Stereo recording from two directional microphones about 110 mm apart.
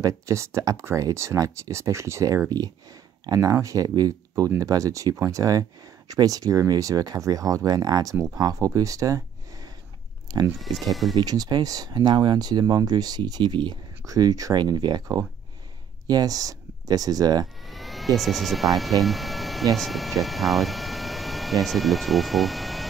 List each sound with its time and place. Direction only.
0.0 s speech: 25° right (ahead or behind)
10.6 s speech: centre (ahead or behind)
11.1 s speech: 35° right (ahead or behind)
17.6 s speech: centre (ahead or behind)